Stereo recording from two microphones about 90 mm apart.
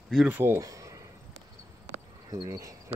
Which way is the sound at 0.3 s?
25° right (ahead or behind).